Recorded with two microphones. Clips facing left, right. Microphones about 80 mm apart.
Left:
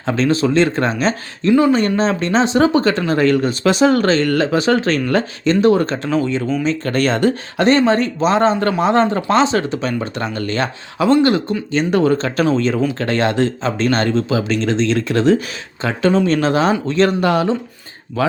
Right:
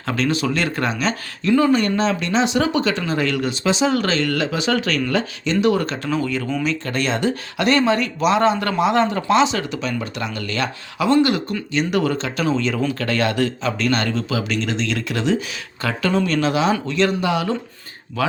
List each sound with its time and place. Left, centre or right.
0.0 s speech: left
6.8 s speech: left
7.7 s speech: left
15.8 s speech: left
18.2 s speech: left